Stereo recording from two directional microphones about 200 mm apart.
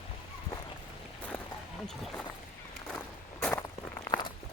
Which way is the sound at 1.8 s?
5° left (ahead or behind).